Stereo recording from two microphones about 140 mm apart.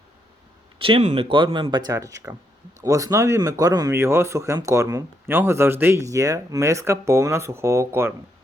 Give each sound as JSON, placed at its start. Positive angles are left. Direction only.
{"t": 0.8, "sound": "speech", "side_deg": -40}